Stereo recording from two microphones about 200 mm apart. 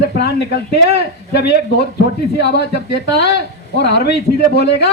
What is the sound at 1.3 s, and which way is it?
Speech, 55° left (ahead or behind).